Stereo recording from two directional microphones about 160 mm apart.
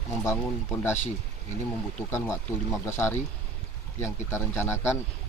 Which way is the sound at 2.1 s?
15° left (ahead or behind).